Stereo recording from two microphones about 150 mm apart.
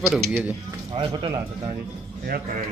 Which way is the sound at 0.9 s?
35° right (ahead or behind).